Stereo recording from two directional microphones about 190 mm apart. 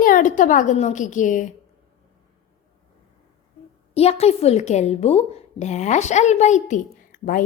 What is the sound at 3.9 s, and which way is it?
A woman's voice, 30° left (ahead or behind).